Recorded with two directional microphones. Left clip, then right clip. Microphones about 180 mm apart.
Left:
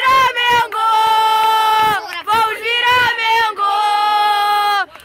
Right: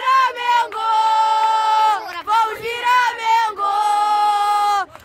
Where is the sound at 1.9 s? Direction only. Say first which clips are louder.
Left 2 dB; centre (ahead or behind).